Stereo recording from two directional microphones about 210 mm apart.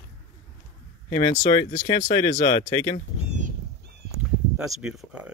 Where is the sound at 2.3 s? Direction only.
30° left (ahead or behind).